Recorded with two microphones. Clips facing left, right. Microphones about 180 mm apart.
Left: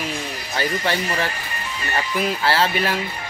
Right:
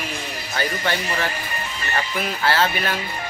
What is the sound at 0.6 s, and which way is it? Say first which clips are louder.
Speech: left 2 dB; 30° left (ahead or behind).